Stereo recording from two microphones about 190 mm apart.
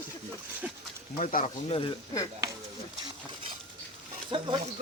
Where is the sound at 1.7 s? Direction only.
20° left (ahead or behind).